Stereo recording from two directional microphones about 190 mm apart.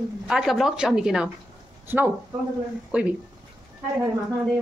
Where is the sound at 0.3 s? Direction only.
Centre (ahead or behind).